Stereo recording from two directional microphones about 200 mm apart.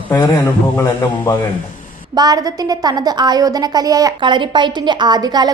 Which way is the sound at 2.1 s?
20° right (ahead or behind).